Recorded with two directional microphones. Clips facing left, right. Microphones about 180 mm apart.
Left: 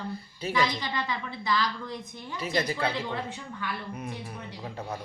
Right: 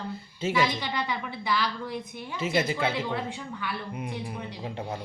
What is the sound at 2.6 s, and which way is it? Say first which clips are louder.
Speech: right 1 dB; 25° right (ahead or behind).